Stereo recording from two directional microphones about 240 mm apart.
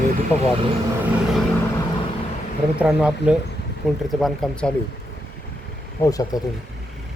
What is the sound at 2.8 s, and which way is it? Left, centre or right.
Speech, centre.